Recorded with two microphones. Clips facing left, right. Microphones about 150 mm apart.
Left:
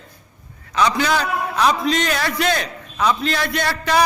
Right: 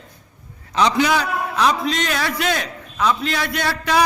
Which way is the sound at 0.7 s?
25° right (ahead or behind).